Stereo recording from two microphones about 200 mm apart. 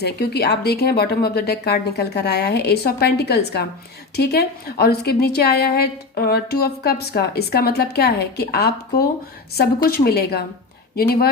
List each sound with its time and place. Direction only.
0.0 s a woman's voice: 55° left (ahead or behind)